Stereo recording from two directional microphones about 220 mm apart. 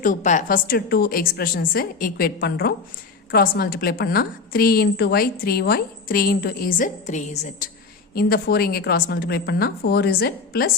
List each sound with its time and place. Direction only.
0.0 s a woman's voice: 35° left (ahead or behind)